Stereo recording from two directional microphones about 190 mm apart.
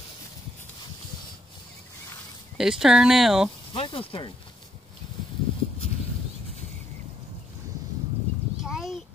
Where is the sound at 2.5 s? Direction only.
5° right (ahead or behind).